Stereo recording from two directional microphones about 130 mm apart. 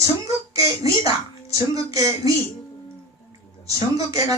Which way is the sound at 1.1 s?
25° right (ahead or behind).